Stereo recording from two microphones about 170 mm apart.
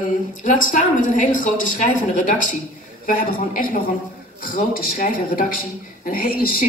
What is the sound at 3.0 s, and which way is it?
A woman's voice, 55° left (ahead or behind).